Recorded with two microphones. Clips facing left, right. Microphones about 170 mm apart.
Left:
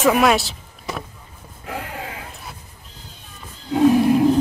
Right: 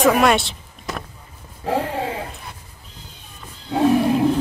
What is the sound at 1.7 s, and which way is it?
Speech, 30° right (ahead or behind).